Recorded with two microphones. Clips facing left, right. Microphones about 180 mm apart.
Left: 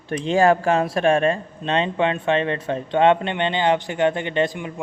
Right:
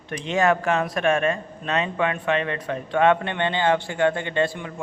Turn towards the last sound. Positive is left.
turn(degrees=15)  # may be behind; listen again after turning